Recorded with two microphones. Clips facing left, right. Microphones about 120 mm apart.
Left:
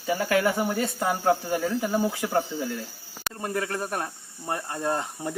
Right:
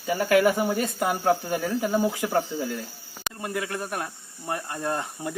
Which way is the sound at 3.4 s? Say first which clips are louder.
Left 1 dB; 35° left (ahead or behind).